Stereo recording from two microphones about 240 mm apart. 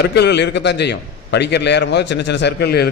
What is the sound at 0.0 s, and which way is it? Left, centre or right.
A man's voice, left.